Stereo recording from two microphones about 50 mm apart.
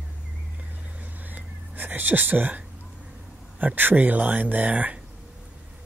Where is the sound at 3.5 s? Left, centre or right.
Right.